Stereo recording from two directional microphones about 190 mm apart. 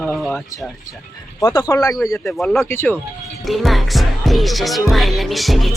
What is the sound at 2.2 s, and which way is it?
Music, 5° left (ahead or behind).